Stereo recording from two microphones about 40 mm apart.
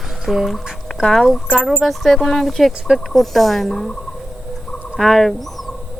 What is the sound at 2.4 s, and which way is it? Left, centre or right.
Speech, centre.